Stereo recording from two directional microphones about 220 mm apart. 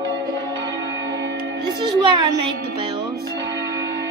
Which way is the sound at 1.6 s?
20° right (ahead or behind).